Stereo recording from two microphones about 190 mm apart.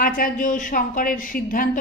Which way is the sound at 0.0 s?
50° left (ahead or behind).